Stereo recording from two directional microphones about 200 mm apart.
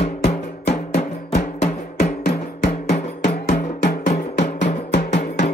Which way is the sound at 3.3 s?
55° left (ahead or behind).